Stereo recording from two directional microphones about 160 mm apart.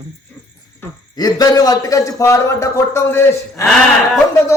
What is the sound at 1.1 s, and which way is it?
Speech, 25° left (ahead or behind).